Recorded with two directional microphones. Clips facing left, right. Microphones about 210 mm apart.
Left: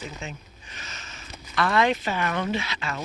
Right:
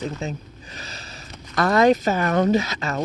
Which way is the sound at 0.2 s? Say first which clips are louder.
Right 8 dB; 35° right (ahead or behind).